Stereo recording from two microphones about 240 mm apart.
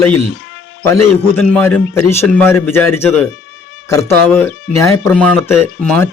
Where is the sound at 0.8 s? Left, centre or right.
Centre.